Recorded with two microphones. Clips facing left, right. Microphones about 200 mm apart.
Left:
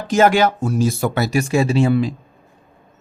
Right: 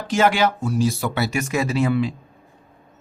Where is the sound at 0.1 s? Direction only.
45° left (ahead or behind).